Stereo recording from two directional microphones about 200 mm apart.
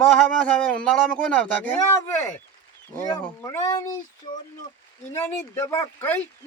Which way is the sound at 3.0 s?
15° left (ahead or behind).